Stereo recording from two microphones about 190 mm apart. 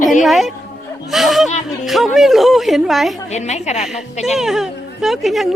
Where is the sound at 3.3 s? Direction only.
35° left (ahead or behind).